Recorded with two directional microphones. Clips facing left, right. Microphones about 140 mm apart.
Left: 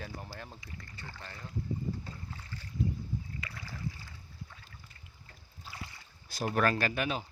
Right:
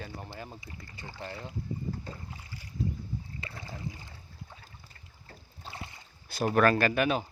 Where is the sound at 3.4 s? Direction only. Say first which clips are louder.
Right 1 dB; 25° right (ahead or behind).